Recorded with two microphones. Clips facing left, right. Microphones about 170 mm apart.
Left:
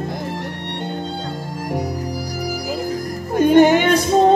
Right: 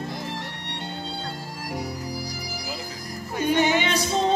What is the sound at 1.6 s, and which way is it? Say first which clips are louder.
Music: left 7 dB; 45° left (ahead or behind).